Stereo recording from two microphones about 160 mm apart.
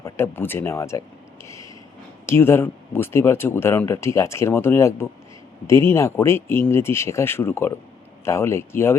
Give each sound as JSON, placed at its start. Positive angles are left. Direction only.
{"t": 0.0, "sound": "speech", "side_deg": 15}